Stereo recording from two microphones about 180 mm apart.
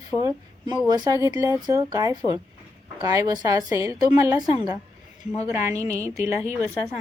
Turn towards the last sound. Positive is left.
turn(degrees=-15)  # may be behind; listen again after turning